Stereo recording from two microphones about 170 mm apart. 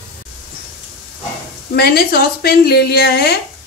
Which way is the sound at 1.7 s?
65° left (ahead or behind).